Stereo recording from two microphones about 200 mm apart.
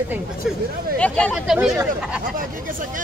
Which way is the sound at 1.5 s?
5° right (ahead or behind).